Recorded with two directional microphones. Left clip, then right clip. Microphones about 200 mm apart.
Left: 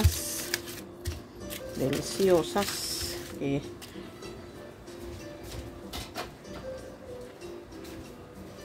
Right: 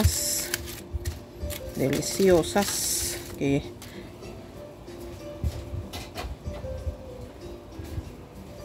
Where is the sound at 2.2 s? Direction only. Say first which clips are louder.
Right 3 dB; 20° right (ahead or behind).